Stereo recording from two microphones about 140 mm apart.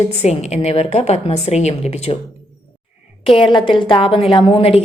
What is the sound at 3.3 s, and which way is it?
A woman's voice, 40° left (ahead or behind).